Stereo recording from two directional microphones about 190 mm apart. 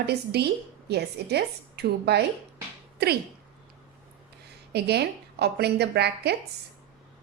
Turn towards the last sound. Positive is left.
turn(degrees=-60)  # may be behind; listen again after turning